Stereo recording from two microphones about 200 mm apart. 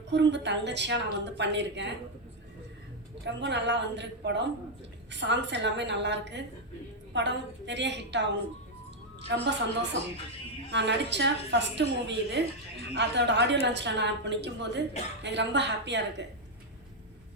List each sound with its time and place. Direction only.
0.1 s a woman's voice: 60° right (ahead or behind)
3.2 s a woman's voice: 60° right (ahead or behind)
9.3 s a woman's voice: 60° right (ahead or behind)